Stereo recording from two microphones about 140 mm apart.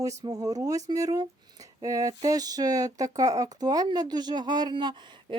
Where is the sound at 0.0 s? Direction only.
25° right (ahead or behind).